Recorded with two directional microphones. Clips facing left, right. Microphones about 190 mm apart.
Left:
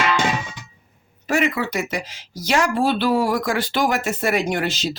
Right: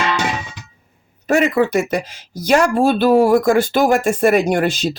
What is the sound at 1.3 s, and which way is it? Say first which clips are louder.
Speech: right 6 dB; 50° right (ahead or behind).